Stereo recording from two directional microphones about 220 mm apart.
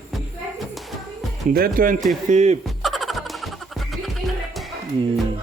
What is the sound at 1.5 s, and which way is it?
Speech, 40° right (ahead or behind).